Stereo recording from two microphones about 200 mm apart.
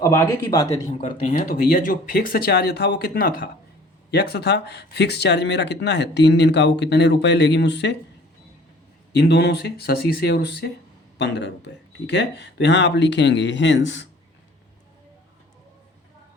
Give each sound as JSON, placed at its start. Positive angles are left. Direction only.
{"t": 0.0, "sound": "speech", "side_deg": 15}
{"t": 1.0, "sound": "speech", "side_deg": 40}
{"t": 9.1, "sound": "speech", "side_deg": 55}